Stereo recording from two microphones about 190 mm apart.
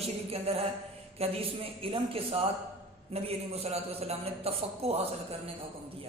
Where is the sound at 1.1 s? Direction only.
30° right (ahead or behind).